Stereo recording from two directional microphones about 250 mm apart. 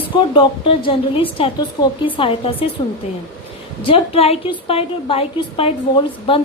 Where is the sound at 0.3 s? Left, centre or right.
Centre.